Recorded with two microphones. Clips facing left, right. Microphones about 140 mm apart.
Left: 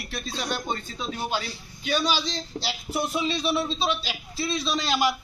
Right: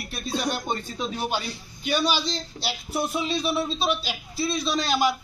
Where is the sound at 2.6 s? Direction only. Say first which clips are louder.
Even; 40° left (ahead or behind).